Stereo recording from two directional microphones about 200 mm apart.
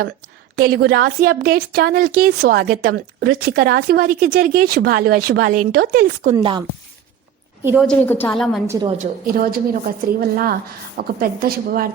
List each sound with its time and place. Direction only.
0.5 s a woman's voice: 50° right (ahead or behind)
6.3 s speech: 20° right (ahead or behind)
7.6 s a woman's voice: 10° right (ahead or behind)
7.9 s a woman's voice: 10° left (ahead or behind)
8.6 s a woman's voice: 15° right (ahead or behind)
9.2 s a woman's voice: 45° right (ahead or behind)